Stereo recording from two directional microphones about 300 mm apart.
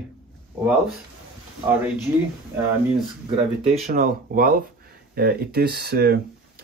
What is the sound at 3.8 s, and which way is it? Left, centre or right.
Speech, right.